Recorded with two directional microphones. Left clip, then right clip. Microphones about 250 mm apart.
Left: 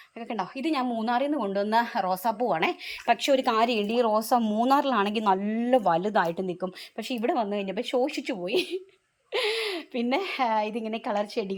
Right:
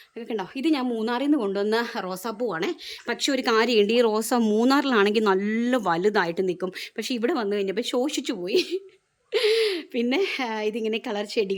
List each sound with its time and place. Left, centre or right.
0.3 s a woman's voice: centre
5.3 s speech: right
5.7 s a woman's voice: centre